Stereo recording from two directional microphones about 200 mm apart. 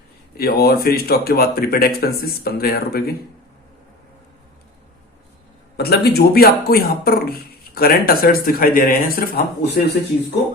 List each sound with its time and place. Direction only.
0.3 s a man's voice: 50° left (ahead or behind)
5.7 s a man's voice: 55° left (ahead or behind)